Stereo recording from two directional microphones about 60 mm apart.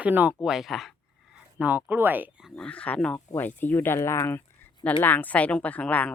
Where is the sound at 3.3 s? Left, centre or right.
Left.